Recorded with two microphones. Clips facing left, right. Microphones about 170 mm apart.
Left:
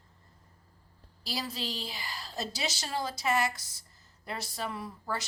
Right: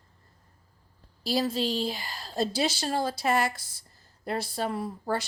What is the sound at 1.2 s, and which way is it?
Speech, 50° right (ahead or behind).